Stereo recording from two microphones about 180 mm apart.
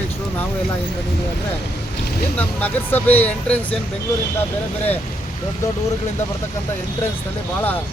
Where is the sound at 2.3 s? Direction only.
10° left (ahead or behind).